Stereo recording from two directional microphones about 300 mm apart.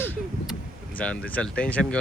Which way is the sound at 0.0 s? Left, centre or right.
Centre.